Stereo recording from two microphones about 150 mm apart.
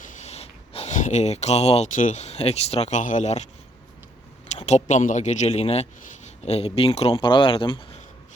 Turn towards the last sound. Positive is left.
turn(degrees=35)  # may be behind; listen again after turning